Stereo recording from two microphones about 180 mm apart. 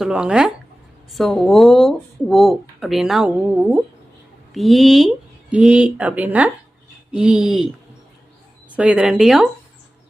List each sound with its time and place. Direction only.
0.0 s speech: 5° right (ahead or behind)
8.7 s speech: 5° right (ahead or behind)